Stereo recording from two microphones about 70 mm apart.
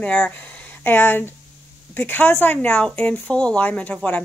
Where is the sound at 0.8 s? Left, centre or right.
Left.